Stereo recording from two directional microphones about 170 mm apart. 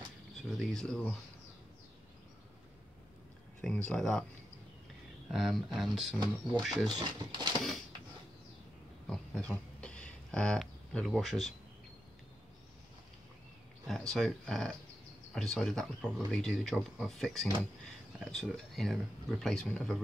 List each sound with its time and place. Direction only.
0.5 s speech: 5° left (ahead or behind)
3.6 s speech: 5° left (ahead or behind)
5.3 s speech: centre (ahead or behind)
6.1 s speech: 25° right (ahead or behind)
6.6 s speech: centre (ahead or behind)
7.0 s speech: 25° right (ahead or behind)
9.1 s a sound: 5° left (ahead or behind)
13.8 s speech: centre (ahead or behind)